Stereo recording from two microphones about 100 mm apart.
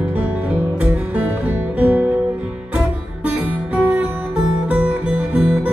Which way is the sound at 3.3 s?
15° right (ahead or behind).